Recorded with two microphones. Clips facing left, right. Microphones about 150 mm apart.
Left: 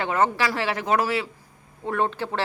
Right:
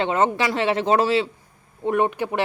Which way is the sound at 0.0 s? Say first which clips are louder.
Right 2 dB; 20° right (ahead or behind).